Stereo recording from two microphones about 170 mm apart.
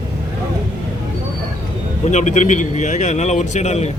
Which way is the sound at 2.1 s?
45° left (ahead or behind).